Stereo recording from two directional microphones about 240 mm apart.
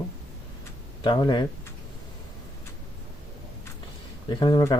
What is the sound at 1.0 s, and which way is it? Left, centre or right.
Speech, centre.